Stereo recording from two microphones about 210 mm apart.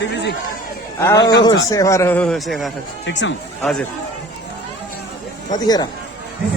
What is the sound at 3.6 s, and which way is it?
Speech, 5° left (ahead or behind).